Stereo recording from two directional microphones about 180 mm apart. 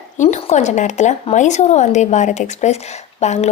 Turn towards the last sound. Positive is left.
turn(degrees=40)  # may be behind; listen again after turning